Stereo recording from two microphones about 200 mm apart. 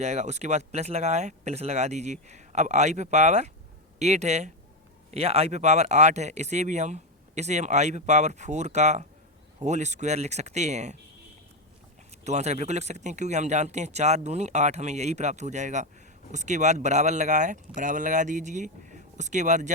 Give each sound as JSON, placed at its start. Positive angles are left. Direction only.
{"t": 0.0, "sound": "speech", "side_deg": -35}
{"t": 12.2, "sound": "speech", "side_deg": -35}